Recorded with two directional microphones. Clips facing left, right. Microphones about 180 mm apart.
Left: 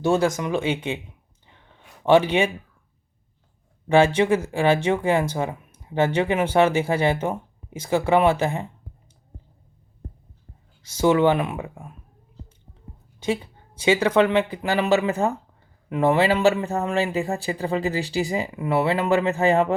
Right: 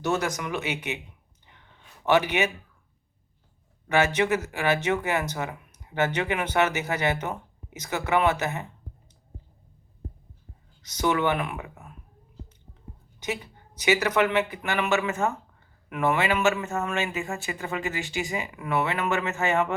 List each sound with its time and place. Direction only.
0.0 s speech: 30° left (ahead or behind)
2.0 s speech: 30° left (ahead or behind)
3.8 s speech: 30° left (ahead or behind)
10.8 s speech: 25° left (ahead or behind)
13.1 s a man's voice: 30° left (ahead or behind)